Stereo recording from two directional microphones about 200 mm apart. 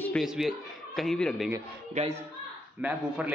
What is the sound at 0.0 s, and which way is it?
A man's voice, centre (ahead or behind).